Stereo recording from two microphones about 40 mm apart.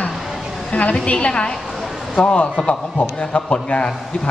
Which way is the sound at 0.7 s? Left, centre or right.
Left.